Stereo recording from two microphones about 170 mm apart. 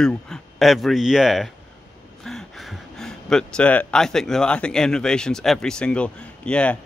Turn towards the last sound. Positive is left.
turn(degrees=5)  # may be behind; listen again after turning